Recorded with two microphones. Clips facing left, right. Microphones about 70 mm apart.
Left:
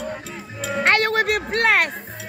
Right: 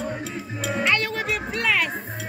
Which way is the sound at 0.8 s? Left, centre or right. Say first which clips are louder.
Left 7 dB; left.